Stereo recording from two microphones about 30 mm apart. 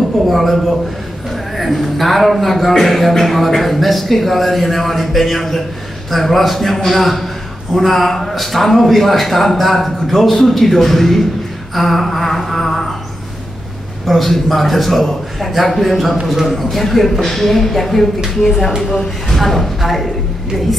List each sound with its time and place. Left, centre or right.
0.3 s speech: centre
1.6 s a sound: centre
2.9 s speech: centre
11.7 s a sound: centre
14.0 s speech: centre
18.4 s speech: centre